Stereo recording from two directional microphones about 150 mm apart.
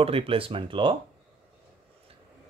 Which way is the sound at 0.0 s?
40° right (ahead or behind).